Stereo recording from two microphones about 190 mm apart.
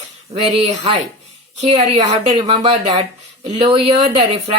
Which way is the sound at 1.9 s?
30° right (ahead or behind).